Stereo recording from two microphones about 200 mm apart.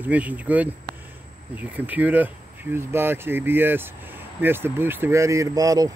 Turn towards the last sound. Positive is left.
turn(degrees=-15)  # may be behind; listen again after turning